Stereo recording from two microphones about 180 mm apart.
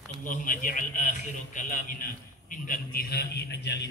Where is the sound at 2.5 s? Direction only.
50° left (ahead or behind); by 3.9 s 70° left (ahead or behind).